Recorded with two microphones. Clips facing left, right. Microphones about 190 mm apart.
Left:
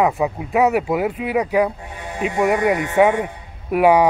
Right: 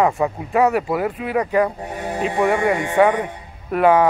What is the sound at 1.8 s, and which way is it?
Music, 40° right (ahead or behind).